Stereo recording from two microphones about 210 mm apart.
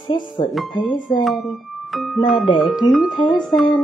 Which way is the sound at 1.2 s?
Centre (ahead or behind).